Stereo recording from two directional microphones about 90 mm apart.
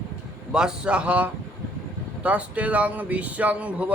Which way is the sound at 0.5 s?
10° right (ahead or behind).